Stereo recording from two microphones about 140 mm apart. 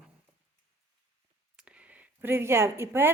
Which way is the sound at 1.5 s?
10° right (ahead or behind).